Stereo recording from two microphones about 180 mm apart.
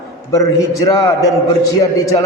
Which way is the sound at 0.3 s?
20° left (ahead or behind).